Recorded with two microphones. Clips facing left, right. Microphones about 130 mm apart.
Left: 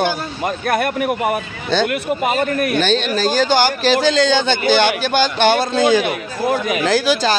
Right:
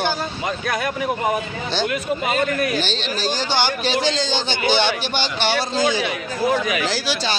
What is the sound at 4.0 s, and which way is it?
A man's voice, 60° left (ahead or behind).